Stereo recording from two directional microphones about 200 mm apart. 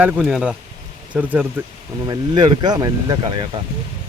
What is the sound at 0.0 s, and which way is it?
Speech, 5° right (ahead or behind).